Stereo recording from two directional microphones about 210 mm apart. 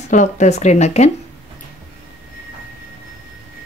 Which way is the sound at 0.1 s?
35° left (ahead or behind).